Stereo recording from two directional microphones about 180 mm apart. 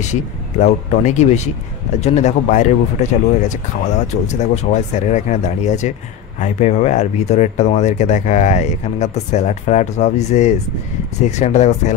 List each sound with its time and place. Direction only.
0.0 s speech: 40° left (ahead or behind)